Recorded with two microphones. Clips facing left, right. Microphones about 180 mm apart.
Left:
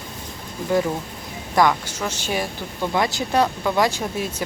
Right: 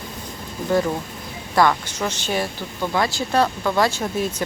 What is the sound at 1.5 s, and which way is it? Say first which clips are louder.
Speech: even; 15° left (ahead or behind).